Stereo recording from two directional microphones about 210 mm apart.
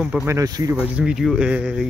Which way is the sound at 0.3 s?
15° right (ahead or behind).